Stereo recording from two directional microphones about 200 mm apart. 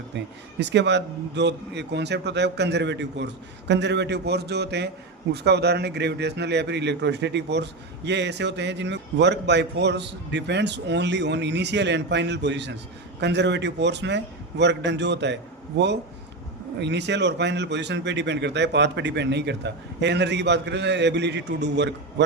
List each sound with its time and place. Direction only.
0.6 s a man's voice: 60° right (ahead or behind)